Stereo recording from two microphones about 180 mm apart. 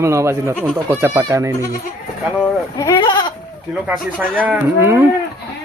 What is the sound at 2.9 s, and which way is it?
Goat, 25° left (ahead or behind).